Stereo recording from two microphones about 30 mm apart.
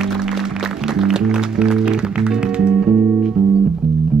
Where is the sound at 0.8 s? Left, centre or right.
Centre.